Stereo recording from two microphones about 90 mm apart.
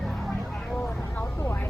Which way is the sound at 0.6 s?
5° left (ahead or behind).